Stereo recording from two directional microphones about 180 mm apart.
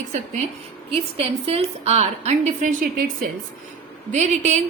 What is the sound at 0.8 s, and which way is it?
A woman's voice, 35° right (ahead or behind).